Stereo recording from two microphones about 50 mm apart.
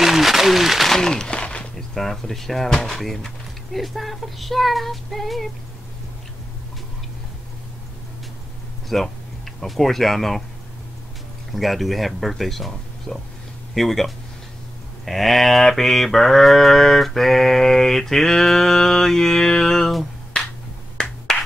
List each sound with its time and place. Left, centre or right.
0.0 s a sound: centre
0.9 s a sound: centre
1.8 s speech: centre
8.8 s speech: centre
11.5 s speech: centre
15.0 s mantra: centre
21.0 s finger snapping: centre